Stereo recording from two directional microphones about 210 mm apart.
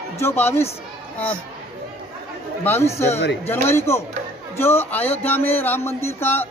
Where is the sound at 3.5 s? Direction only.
10° left (ahead or behind).